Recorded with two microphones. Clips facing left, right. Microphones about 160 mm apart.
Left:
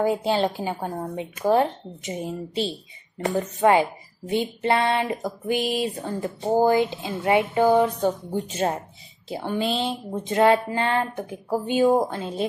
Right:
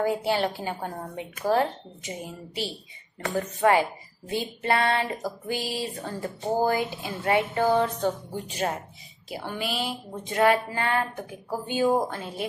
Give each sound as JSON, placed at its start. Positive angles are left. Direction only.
{"t": 0.0, "sound": "speech", "side_deg": 20}